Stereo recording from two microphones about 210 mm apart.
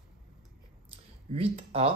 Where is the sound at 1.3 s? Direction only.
30° right (ahead or behind).